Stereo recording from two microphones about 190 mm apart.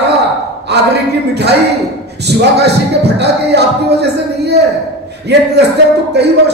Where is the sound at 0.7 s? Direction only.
60° right (ahead or behind).